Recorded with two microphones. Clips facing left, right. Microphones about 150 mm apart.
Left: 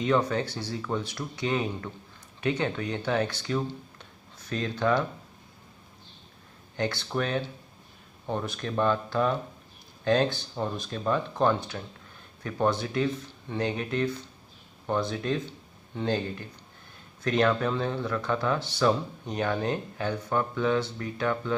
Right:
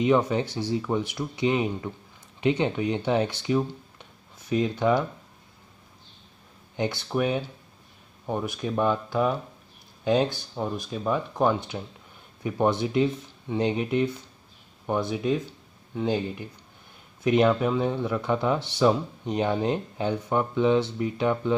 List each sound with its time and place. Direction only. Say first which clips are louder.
0.0 s speech: right 3 dB; 15° right (ahead or behind)
6.8 s speech: right 3 dB; 15° right (ahead or behind)